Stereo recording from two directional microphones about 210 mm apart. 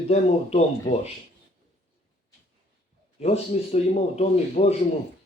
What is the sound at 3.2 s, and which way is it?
Speech, 30° left (ahead or behind).